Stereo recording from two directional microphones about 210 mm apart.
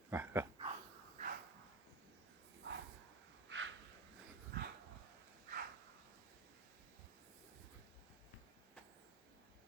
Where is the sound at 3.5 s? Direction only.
65° right (ahead or behind).